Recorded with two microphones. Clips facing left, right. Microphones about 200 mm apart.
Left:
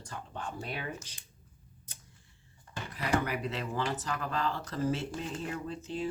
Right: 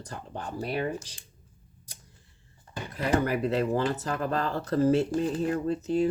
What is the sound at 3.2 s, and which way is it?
Speech, 40° right (ahead or behind).